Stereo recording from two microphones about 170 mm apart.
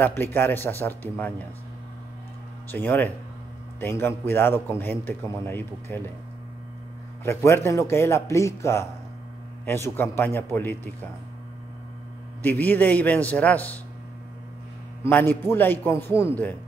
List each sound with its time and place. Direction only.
0.0 s a man's voice: 10° left (ahead or behind)
2.7 s a man's voice: 10° left (ahead or behind)
7.2 s a man's voice: 15° left (ahead or behind)
12.4 s a man's voice: 10° left (ahead or behind)
15.0 s a man's voice: 10° left (ahead or behind)